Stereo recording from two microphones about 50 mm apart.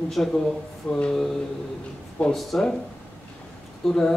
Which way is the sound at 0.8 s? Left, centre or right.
Left.